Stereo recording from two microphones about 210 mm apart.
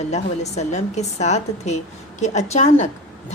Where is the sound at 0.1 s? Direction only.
30° left (ahead or behind).